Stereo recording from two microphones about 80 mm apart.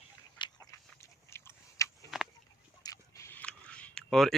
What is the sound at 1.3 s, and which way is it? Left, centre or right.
Biting, left.